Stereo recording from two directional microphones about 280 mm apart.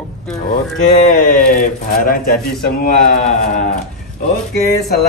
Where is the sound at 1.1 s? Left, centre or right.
Left.